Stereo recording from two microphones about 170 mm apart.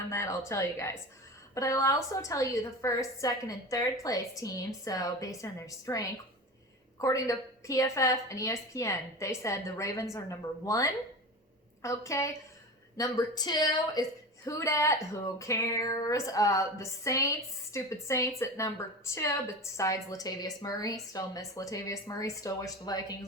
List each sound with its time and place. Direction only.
0.1 s a woman's voice: 15° left (ahead or behind)